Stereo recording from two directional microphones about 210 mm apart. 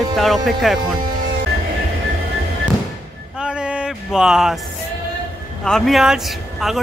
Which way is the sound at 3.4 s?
5° right (ahead or behind).